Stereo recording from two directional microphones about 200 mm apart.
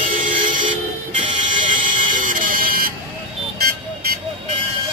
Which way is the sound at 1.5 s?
40° right (ahead or behind).